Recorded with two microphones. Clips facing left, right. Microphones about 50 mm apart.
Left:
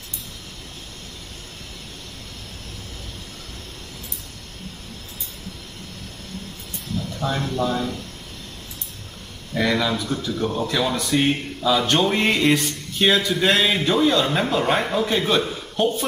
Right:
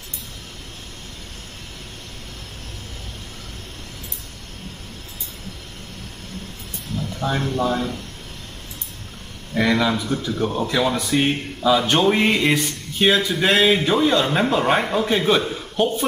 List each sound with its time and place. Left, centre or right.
7.2 s speech: centre
9.5 s speech: centre